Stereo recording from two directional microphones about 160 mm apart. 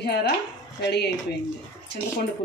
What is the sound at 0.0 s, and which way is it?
Speech, 90° left.